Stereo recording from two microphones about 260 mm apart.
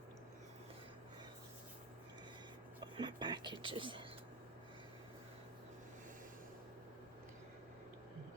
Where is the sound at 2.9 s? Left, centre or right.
Centre.